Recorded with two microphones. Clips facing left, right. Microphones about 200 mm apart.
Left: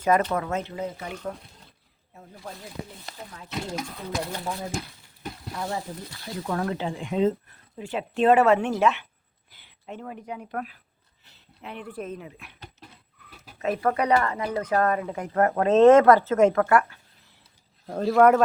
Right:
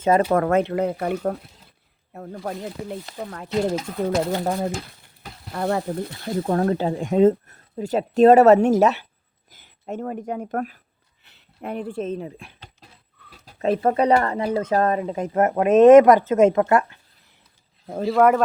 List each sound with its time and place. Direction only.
0.3 s speech: 60° right (ahead or behind)
4.4 s speech: 45° right (ahead or behind)
5.5 s speech: 60° right (ahead or behind)
6.4 s speech: 35° right (ahead or behind)
11.2 s a sound: 60° right (ahead or behind)
11.7 s speech: 30° right (ahead or behind)
13.6 s speech: 30° right (ahead or behind)
17.9 s a man's voice: 5° right (ahead or behind)